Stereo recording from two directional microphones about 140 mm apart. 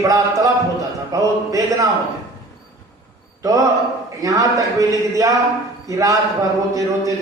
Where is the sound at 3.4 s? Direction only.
25° right (ahead or behind).